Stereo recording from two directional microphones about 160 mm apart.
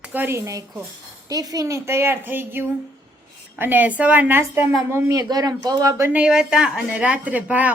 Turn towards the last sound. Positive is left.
turn(degrees=-10)  # may be behind; listen again after turning